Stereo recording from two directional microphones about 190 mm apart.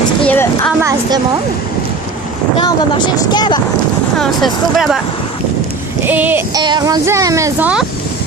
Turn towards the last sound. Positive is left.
turn(degrees=-15)  # may be behind; listen again after turning